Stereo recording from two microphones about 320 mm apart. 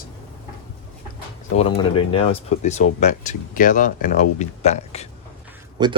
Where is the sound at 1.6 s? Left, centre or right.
Centre.